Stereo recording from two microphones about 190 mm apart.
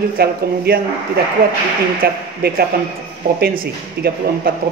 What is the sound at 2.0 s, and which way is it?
Speech, 55° right (ahead or behind).